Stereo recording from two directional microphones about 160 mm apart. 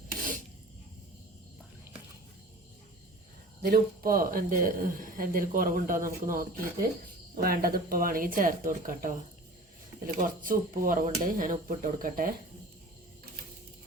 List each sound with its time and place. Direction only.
3.6 s speech: 65° right (ahead or behind)
10.2 s speech: 55° right (ahead or behind)